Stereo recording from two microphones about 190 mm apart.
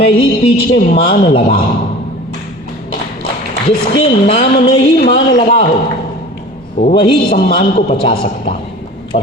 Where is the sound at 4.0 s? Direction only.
30° left (ahead or behind).